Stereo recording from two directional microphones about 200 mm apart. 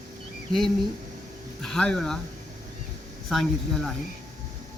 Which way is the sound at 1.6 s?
5° left (ahead or behind).